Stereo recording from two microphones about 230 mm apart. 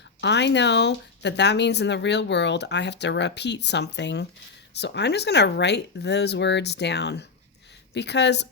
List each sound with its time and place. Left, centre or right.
0.2 s speech: left